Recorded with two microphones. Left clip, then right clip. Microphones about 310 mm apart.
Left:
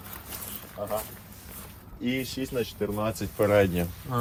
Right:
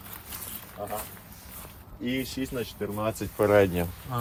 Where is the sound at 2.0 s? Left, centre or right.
Centre.